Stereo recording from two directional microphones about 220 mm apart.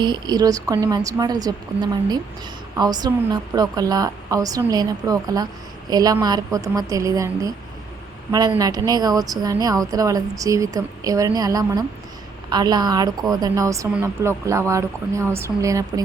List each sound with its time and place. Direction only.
0.0 s a woman's voice: 20° right (ahead or behind)